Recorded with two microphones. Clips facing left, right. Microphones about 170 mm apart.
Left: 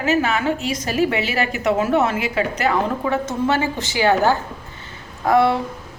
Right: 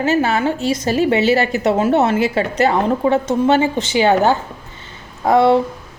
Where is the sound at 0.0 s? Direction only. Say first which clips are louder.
Right 3 dB; 30° right (ahead or behind).